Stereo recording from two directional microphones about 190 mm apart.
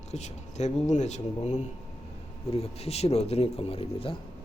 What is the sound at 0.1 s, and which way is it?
Speech, 35° left (ahead or behind).